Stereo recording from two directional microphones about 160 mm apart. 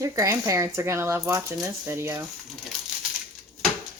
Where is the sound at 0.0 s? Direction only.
20° right (ahead or behind).